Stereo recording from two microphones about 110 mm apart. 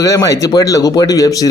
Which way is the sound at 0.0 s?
30° left (ahead or behind).